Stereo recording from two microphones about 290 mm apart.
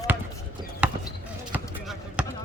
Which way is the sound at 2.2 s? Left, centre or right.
Centre.